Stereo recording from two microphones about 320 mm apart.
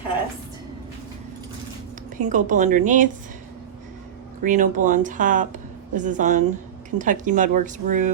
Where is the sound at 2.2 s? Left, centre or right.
Right.